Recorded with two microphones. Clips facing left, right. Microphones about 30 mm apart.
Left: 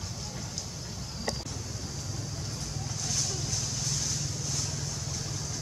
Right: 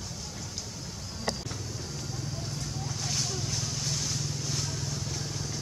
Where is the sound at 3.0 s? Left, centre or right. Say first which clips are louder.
Even; right.